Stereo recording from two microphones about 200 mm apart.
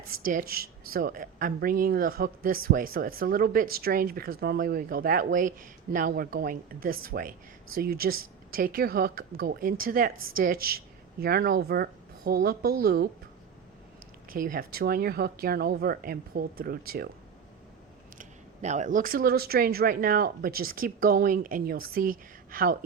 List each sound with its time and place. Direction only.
0.3 s speech: 45° right (ahead or behind)
14.3 s speech: 45° right (ahead or behind)
18.2 s speech: 35° right (ahead or behind)